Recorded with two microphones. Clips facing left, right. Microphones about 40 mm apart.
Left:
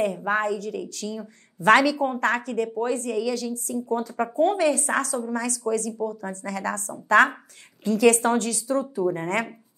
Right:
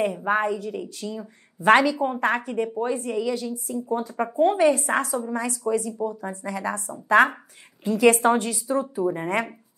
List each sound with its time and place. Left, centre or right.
0.0 s a woman's voice: centre
4.2 s a woman's voice: centre
4.6 s a woman's voice: right